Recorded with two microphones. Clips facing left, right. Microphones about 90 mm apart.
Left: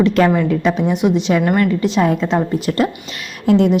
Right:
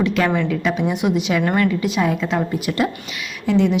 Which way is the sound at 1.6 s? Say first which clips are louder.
Left 3 dB; 30° left (ahead or behind).